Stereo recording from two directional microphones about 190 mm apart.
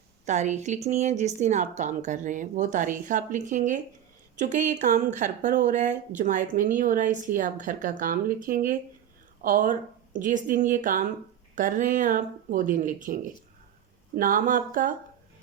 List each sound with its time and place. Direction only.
0.3 s a woman's voice: 40° right (ahead or behind)
14.2 s a woman's voice: 45° right (ahead or behind)